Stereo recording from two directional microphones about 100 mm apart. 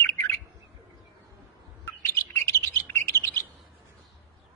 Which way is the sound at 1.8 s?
25° left (ahead or behind).